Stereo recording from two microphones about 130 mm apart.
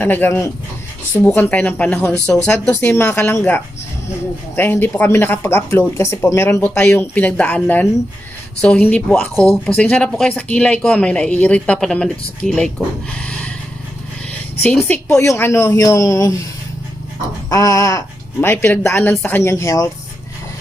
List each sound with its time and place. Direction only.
0.0 s speech: 15° left (ahead or behind)
14.8 s speech: 15° left (ahead or behind)
17.5 s speech: 25° left (ahead or behind)